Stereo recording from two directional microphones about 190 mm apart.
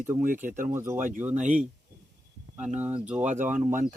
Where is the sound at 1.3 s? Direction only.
40° right (ahead or behind).